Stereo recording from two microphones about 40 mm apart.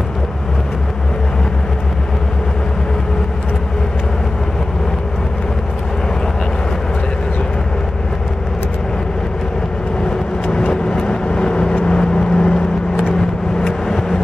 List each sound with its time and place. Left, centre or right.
11.1 s vehicle: left
13.6 s vehicle: centre